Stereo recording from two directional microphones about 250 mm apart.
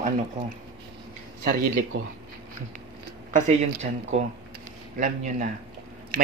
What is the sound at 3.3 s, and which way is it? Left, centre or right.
Speech, right.